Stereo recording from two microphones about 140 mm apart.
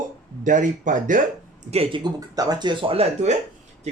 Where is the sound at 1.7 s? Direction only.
45° right (ahead or behind).